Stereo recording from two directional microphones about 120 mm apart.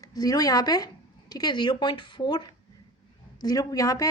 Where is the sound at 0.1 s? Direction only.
30° left (ahead or behind).